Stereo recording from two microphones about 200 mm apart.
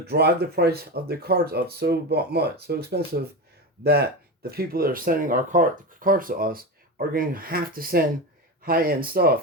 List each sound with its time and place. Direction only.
0.0 s speech: 55° right (ahead or behind)